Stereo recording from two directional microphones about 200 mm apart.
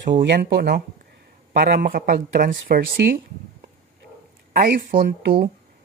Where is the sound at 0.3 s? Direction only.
55° right (ahead or behind).